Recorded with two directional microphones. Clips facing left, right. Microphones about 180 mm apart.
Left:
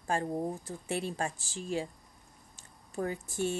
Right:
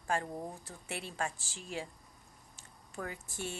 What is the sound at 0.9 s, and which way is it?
Speech, 40° left (ahead or behind).